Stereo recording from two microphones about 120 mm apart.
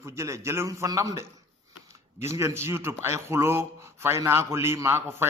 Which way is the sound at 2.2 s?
25° right (ahead or behind).